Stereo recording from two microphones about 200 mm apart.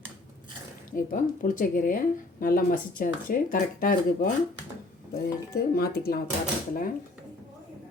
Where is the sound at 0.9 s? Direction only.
40° left (ahead or behind).